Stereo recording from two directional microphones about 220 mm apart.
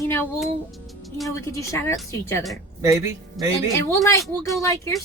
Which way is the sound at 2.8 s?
15° right (ahead or behind).